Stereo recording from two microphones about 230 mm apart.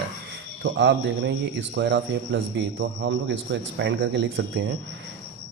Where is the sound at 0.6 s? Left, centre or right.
Right.